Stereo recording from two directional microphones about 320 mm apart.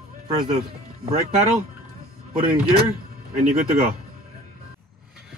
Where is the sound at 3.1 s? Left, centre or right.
Right.